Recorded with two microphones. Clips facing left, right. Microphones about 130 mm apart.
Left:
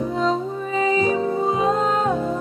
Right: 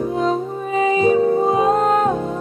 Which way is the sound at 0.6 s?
45° right (ahead or behind).